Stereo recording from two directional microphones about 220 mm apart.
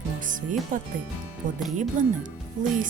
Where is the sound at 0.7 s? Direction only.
35° right (ahead or behind).